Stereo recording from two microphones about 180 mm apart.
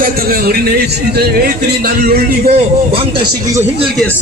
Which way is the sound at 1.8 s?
55° right (ahead or behind).